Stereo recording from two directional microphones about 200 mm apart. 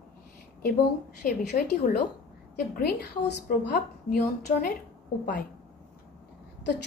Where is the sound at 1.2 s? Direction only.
50° left (ahead or behind).